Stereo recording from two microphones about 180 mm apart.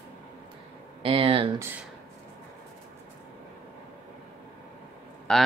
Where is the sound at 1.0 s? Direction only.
30° right (ahead or behind).